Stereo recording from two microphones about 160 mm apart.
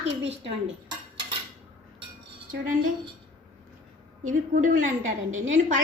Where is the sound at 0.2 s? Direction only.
90° right.